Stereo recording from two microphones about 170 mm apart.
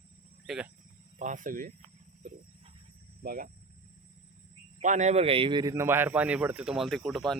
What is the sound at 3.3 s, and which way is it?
Speech, 55° right (ahead or behind).